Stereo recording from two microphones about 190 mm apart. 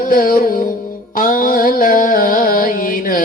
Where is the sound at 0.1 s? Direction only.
50° left (ahead or behind).